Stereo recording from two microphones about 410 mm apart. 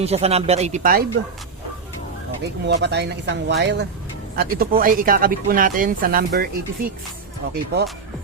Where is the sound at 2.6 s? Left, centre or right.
Right.